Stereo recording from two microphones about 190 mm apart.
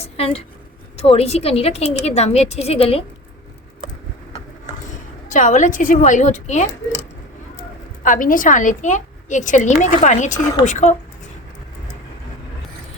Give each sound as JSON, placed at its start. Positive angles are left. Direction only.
{"t": 0.0, "sound": "a woman's voice", "side_deg": 30}
{"t": 5.3, "sound": "a woman's voice", "side_deg": 40}
{"t": 8.0, "sound": "a woman's voice", "side_deg": 45}